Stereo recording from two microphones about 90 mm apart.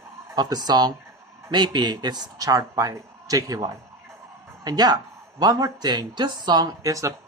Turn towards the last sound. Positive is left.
turn(degrees=-40)  # may be behind; listen again after turning